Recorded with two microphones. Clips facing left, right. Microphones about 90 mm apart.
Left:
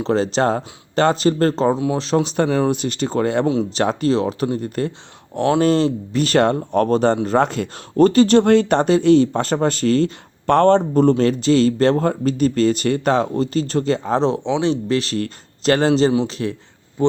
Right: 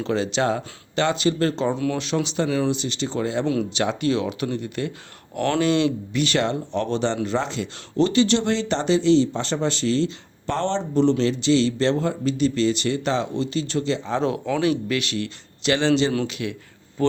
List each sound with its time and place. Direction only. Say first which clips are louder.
0.0 s speech: left 5 dB; 40° left (ahead or behind)
3.4 s speech: left 4 dB; 30° left (ahead or behind)
3.8 s speech: left 4 dB; 40° left (ahead or behind)
14.2 s speech: left 4 dB; 30° left (ahead or behind)
17.0 s speech: left 4 dB; 20° left (ahead or behind)